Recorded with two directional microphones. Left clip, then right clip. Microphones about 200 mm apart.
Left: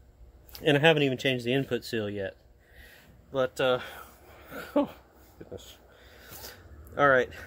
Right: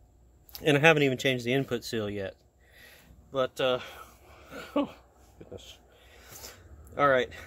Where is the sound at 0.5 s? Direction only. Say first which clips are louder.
Even; 20° right (ahead or behind).